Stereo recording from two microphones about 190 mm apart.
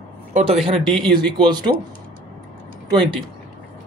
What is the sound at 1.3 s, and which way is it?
Speech, 20° right (ahead or behind).